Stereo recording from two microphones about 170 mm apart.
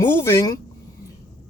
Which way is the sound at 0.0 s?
15° left (ahead or behind).